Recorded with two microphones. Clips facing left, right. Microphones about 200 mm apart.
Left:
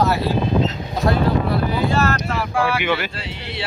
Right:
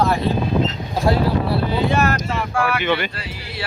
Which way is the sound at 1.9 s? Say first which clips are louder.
Even; 15° right (ahead or behind).